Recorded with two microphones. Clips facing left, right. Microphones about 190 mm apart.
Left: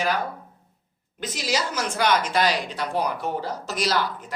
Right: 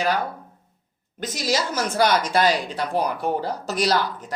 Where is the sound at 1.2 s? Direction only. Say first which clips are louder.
Right 2 dB; 40° right (ahead or behind).